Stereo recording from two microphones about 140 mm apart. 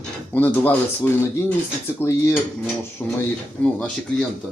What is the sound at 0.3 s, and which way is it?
Speech, 15° left (ahead or behind).